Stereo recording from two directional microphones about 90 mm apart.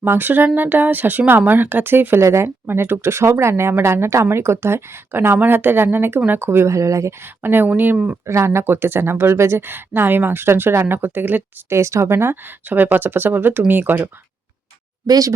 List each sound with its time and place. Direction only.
0.0 s speech: 20° right (ahead or behind)
7.4 s speech: 20° right (ahead or behind)
8.3 s speech: 30° right (ahead or behind)
11.8 s speech: 35° right (ahead or behind)
15.0 s speech: 45° right (ahead or behind)